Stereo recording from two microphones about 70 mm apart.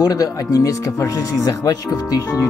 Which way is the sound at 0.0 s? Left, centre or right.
Left.